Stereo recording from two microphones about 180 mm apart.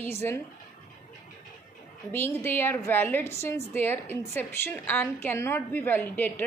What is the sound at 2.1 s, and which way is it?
A woman's voice, 10° left (ahead or behind).